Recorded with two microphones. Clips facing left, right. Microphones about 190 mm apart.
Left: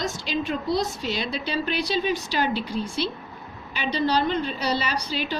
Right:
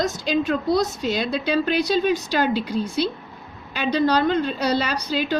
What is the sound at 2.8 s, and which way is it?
A woman's voice, 40° right (ahead or behind).